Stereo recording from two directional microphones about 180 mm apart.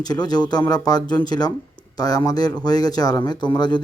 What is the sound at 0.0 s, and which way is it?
A man's voice, 20° left (ahead or behind).